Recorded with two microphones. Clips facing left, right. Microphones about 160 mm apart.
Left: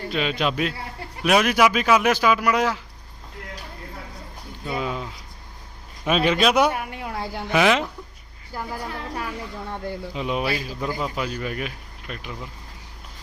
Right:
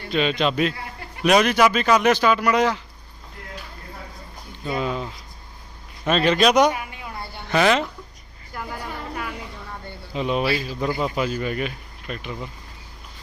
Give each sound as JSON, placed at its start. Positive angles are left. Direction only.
{"t": 0.1, "sound": "speech", "side_deg": 5}
{"t": 4.6, "sound": "speech", "side_deg": 5}
{"t": 6.7, "sound": "a sound", "side_deg": 60}
{"t": 7.5, "sound": "speech", "side_deg": 10}
{"t": 8.5, "sound": "a woman's voice", "side_deg": 30}
{"t": 10.2, "sound": "speech", "side_deg": 10}
{"t": 10.8, "sound": "speech", "side_deg": -10}